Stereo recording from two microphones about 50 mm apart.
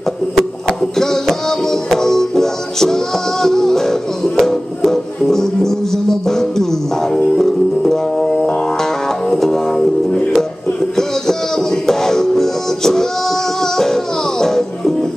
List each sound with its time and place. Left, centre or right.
0.7 s music: centre
11.0 s music: centre
14.4 s music: centre